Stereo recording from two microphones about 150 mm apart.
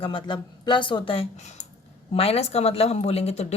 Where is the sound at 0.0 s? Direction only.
35° left (ahead or behind).